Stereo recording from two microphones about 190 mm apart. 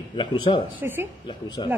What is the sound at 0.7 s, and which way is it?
Speech, 10° right (ahead or behind).